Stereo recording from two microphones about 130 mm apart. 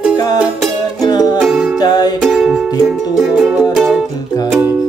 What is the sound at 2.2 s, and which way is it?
Music, 5° right (ahead or behind).